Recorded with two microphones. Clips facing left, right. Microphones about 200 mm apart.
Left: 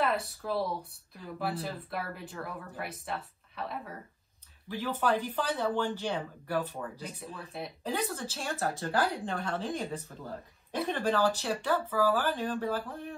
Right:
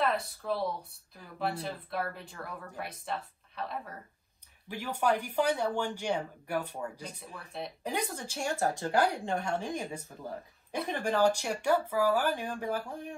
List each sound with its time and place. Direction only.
0.0 s speech: centre (ahead or behind)
4.6 s speech: 15° right (ahead or behind)